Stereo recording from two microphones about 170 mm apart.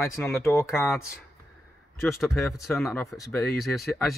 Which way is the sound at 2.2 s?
Centre (ahead or behind).